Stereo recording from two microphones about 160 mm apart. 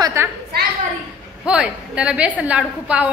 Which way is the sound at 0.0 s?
15° right (ahead or behind).